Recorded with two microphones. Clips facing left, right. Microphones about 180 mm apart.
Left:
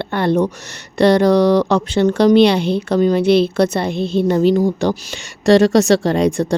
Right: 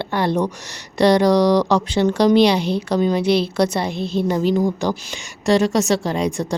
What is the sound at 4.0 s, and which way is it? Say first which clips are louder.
Speech: left 4 dB; 25° left (ahead or behind).